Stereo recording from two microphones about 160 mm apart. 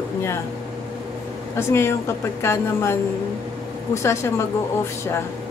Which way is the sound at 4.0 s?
15° left (ahead or behind).